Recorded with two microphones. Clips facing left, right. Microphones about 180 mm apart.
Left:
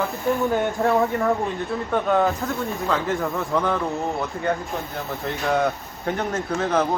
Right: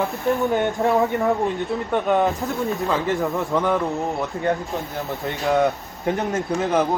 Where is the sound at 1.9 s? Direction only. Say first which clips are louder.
Even; 15° right (ahead or behind).